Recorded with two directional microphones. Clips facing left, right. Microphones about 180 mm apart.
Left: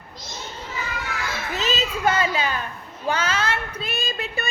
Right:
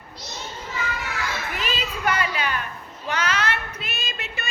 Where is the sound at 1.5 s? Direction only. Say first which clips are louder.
Left 4 dB; 25° left (ahead or behind).